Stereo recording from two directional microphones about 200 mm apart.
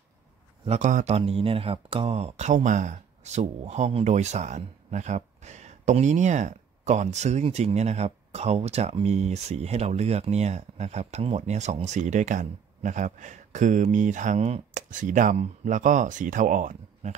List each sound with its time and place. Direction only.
0.7 s speech: 35° right (ahead or behind)